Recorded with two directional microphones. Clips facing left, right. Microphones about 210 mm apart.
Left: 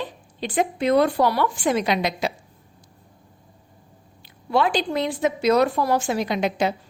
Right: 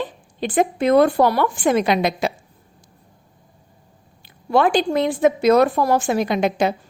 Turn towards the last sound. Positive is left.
turn(degrees=-50)  # may be behind; listen again after turning